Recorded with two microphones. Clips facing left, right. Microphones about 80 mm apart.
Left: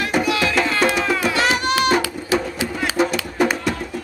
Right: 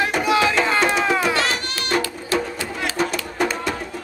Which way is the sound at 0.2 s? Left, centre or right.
Right.